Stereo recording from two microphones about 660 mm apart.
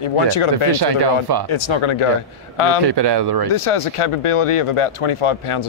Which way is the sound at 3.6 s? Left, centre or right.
Left.